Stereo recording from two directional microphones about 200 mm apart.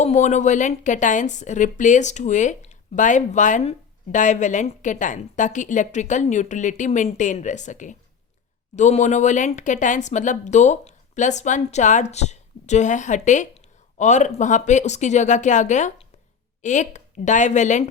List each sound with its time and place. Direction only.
0.0 s a woman's voice: 35° left (ahead or behind)